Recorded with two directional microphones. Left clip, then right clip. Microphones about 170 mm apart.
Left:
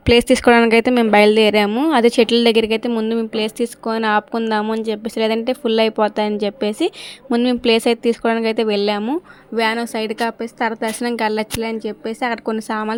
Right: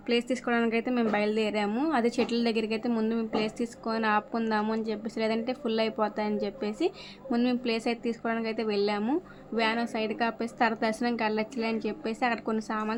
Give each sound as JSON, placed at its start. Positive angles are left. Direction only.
{"t": 0.0, "sound": "speech", "side_deg": 65}